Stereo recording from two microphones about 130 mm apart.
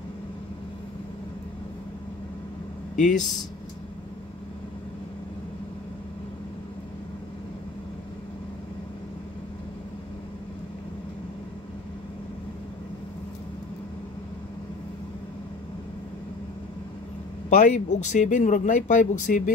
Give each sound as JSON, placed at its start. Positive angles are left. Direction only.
{"t": 3.0, "sound": "speech", "side_deg": 70}
{"t": 17.5, "sound": "speech", "side_deg": 70}